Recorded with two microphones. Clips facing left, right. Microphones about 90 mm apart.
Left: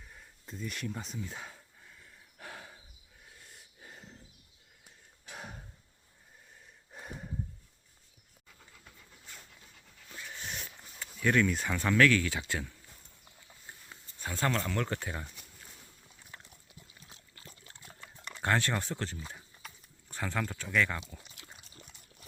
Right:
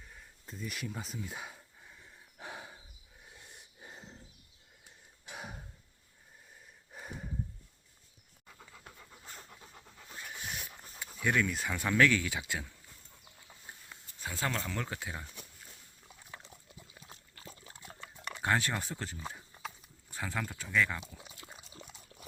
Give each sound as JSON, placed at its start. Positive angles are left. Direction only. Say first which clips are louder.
{"t": 0.0, "sound": "a sound", "louder": "even", "side_deg": 0}
{"t": 5.3, "sound": "gasp", "louder": "even", "side_deg": -5}
{"t": 6.9, "sound": "a sound", "louder": "even", "side_deg": 0}
{"t": 9.2, "sound": "pant", "louder": "right 3 dB", "side_deg": -40}
{"t": 10.2, "sound": "dog", "louder": "even", "side_deg": -5}
{"t": 11.2, "sound": "speech", "louder": "left 3 dB", "side_deg": -5}
{"t": 11.9, "sound": "speech", "louder": "left 2 dB", "side_deg": -15}
{"t": 14.2, "sound": "speech", "louder": "left 4 dB", "side_deg": -5}
{"t": 16.4, "sound": "trickle", "louder": "right 2 dB", "side_deg": -15}
{"t": 17.6, "sound": "pig", "louder": "right 3 dB", "side_deg": -5}
{"t": 18.2, "sound": "speech", "louder": "left 1 dB", "side_deg": -5}
{"t": 21.1, "sound": "pour", "louder": "right 1 dB", "side_deg": -15}